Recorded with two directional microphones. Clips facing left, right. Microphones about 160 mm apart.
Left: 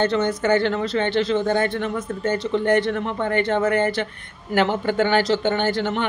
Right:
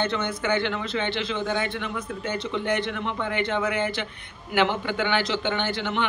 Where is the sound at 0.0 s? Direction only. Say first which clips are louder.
Left 6 dB; 40° left (ahead or behind).